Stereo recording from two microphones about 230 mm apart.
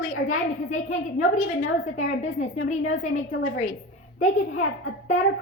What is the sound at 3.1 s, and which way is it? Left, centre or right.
Speech, left.